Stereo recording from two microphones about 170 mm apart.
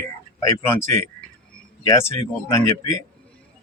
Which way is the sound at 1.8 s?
15° left (ahead or behind).